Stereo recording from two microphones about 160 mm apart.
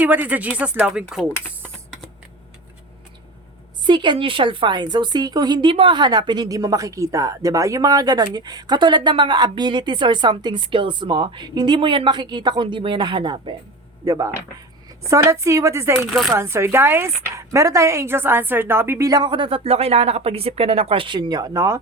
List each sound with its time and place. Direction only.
0.0 s speech: 10° right (ahead or behind)
1.6 s computer keyboard: 5° left (ahead or behind)
3.8 s a woman's voice: 30° right (ahead or behind)